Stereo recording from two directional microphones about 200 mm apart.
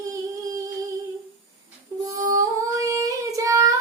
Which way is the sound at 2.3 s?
15° right (ahead or behind).